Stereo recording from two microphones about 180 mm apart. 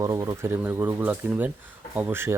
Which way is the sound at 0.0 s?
15° right (ahead or behind).